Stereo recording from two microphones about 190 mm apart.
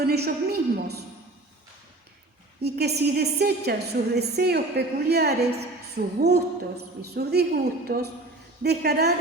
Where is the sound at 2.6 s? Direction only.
60° right (ahead or behind).